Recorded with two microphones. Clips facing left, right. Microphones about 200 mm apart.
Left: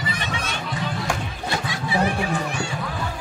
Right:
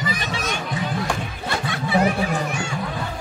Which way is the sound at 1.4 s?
55° right (ahead or behind).